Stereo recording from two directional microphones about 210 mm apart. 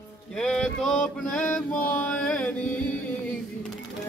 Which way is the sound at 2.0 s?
5° left (ahead or behind).